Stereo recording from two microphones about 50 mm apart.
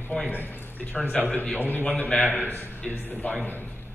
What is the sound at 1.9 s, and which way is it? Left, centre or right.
A man's voice, left.